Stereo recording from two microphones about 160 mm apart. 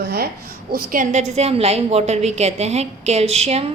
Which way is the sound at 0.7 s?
65° right (ahead or behind).